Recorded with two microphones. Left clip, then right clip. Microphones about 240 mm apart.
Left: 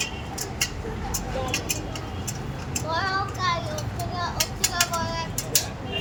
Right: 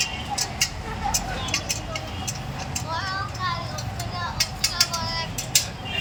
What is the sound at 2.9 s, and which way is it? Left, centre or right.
Child singing, left.